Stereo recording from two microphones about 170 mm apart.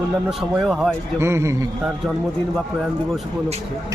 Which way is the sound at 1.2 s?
15° right (ahead or behind).